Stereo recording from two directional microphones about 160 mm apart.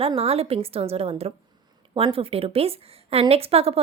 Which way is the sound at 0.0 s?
35° right (ahead or behind).